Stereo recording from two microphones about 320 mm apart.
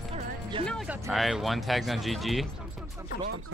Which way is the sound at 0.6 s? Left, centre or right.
Centre.